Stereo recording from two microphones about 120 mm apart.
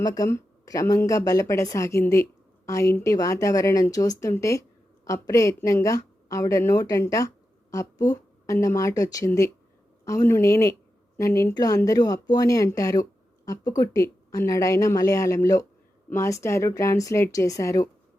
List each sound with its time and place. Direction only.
0.0 s speech: 30° left (ahead or behind)
7.7 s a sound: 30° left (ahead or behind)
8.5 s speech: 25° left (ahead or behind)